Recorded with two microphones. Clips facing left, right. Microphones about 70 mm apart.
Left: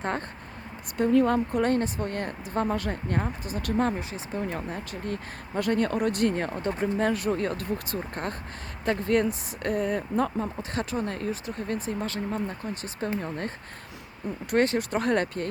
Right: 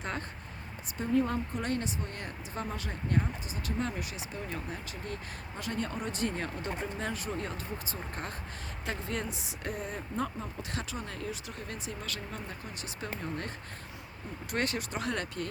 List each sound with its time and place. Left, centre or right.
0.0 s speech: left
0.9 s a woman's voice: left
1.6 s speech: left
3.9 s speech: left
14.5 s speech: left